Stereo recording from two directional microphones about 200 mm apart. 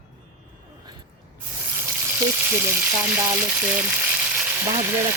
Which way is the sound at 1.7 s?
10° right (ahead or behind).